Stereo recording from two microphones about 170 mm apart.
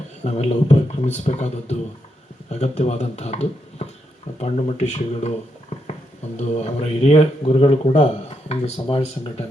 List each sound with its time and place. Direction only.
0.3 s speech: 40° left (ahead or behind)